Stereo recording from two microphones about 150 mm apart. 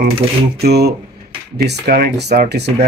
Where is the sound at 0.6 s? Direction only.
90° right.